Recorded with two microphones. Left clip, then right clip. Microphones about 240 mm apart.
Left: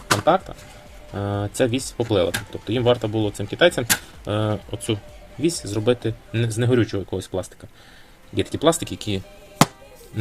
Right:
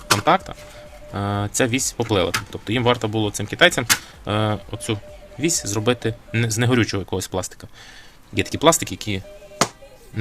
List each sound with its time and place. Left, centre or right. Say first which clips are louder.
0.1 s speech: right 1 dB; right
8.4 s speech: right 3 dB; right
9.0 s speech: even; centre